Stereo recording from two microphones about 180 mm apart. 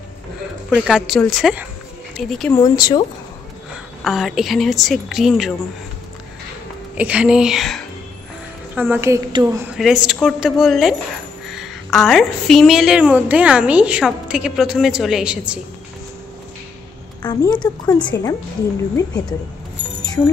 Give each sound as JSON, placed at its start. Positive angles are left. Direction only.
{"t": 0.7, "sound": "a woman's voice", "side_deg": 0}
{"t": 2.5, "sound": "a woman's voice", "side_deg": 20}
{"t": 3.7, "sound": "a woman's voice", "side_deg": 0}
{"t": 7.0, "sound": "a woman's voice", "side_deg": -5}
{"t": 8.7, "sound": "a woman's voice", "side_deg": -10}
{"t": 9.8, "sound": "a woman's voice", "side_deg": 0}
{"t": 17.2, "sound": "a woman's voice", "side_deg": 25}